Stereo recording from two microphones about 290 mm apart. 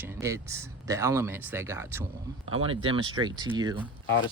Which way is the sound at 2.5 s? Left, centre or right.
Centre.